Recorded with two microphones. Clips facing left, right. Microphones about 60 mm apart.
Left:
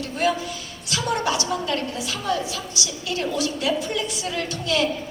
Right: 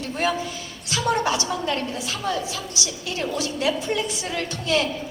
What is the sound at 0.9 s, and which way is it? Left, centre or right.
Speech, right.